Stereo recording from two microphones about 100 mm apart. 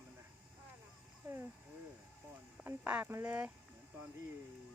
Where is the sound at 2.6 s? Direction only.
15° right (ahead or behind).